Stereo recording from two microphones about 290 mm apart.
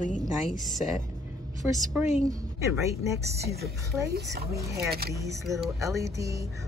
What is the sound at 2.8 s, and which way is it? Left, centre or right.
Speech, centre.